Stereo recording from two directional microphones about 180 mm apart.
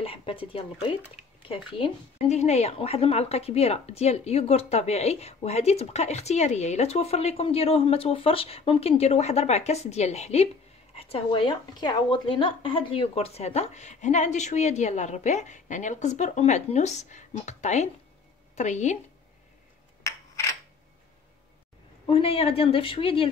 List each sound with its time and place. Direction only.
0.0 s speech: 30° left (ahead or behind)
20.0 s a sound: 15° left (ahead or behind)
22.0 s speech: 30° left (ahead or behind)